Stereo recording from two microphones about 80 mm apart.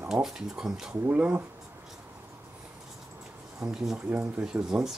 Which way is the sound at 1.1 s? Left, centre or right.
Centre.